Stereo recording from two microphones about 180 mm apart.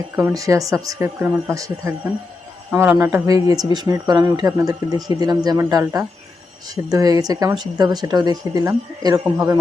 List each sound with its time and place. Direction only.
0.2 s speech: 20° right (ahead or behind)